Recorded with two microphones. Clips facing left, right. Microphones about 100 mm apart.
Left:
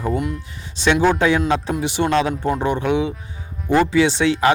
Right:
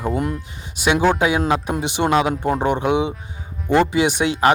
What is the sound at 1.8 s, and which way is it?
A man's voice, 20° right (ahead or behind).